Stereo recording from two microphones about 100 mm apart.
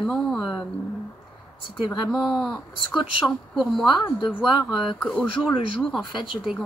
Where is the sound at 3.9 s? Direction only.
50° left (ahead or behind).